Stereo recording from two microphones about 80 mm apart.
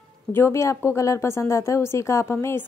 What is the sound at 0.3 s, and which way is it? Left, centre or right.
A woman's voice, left.